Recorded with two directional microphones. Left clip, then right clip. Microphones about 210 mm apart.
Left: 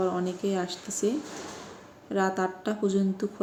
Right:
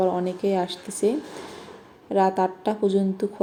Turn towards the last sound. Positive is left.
turn(degrees=0)  # may be behind; listen again after turning